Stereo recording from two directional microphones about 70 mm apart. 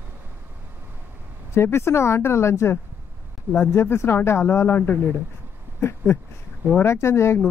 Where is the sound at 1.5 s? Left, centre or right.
Left.